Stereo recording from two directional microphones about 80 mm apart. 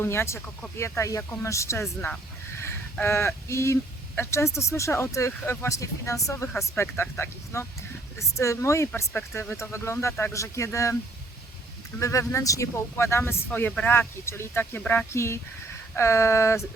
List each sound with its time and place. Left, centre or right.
0.0 s speech: left
11.9 s speech: left